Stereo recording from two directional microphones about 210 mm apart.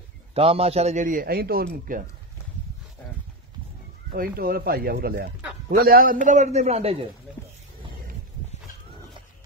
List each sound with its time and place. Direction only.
0.3 s a man's voice: 30° right (ahead or behind); by 2.0 s 45° right (ahead or behind)
4.4 s a man's voice: 45° right (ahead or behind); by 7.1 s 30° right (ahead or behind)